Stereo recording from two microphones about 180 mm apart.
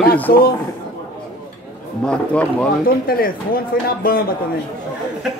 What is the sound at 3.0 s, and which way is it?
Speech, 55° left (ahead or behind).